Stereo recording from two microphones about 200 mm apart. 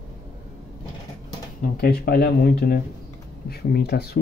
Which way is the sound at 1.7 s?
50° left (ahead or behind).